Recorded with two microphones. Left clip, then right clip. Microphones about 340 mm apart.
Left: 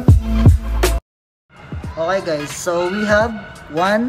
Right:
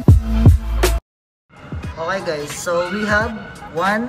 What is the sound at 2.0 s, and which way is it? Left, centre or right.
Speech, centre.